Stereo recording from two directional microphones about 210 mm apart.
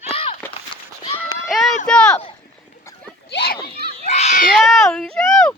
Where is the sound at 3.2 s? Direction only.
50° left (ahead or behind).